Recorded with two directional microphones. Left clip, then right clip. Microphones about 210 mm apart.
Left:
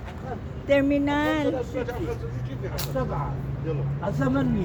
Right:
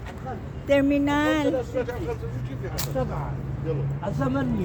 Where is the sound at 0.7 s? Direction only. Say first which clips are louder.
Right 1 dB; 10° right (ahead or behind).